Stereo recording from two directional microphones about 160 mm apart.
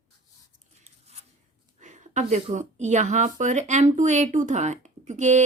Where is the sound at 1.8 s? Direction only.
50° right (ahead or behind).